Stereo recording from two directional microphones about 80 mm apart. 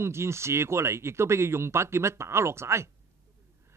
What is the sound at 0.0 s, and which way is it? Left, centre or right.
Speech, right.